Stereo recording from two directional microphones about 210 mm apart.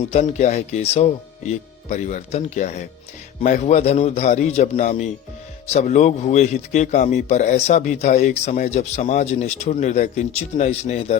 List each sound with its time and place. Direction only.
0.1 s a man's voice: 35° left (ahead or behind)